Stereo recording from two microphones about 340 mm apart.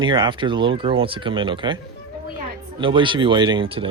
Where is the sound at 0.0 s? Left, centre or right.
Centre.